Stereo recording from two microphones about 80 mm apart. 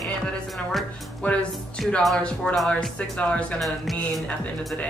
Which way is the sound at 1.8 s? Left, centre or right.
Centre.